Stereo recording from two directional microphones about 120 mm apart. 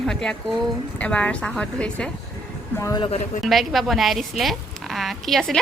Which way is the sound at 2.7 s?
25° left (ahead or behind).